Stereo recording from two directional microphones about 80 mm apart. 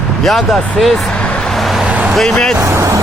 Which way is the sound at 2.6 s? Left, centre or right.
Right.